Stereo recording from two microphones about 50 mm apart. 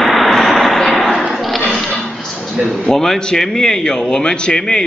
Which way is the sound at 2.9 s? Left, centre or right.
Centre.